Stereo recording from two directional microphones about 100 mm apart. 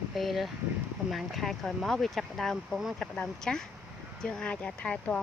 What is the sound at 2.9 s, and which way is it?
Speech, 10° left (ahead or behind).